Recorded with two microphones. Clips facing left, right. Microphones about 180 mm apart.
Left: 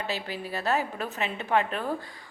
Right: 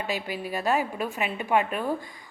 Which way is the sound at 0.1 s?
15° right (ahead or behind).